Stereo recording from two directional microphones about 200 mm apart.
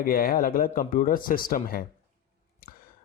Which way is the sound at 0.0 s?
45° left (ahead or behind).